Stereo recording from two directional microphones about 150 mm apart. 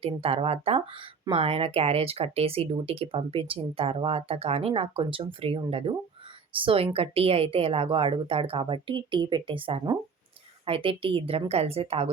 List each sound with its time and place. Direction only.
0.0 s speech: 40° right (ahead or behind)